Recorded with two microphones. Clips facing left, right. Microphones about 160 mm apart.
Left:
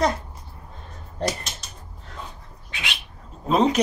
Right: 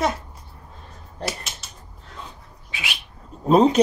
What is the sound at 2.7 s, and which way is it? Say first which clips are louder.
Bird: even; 10° right (ahead or behind).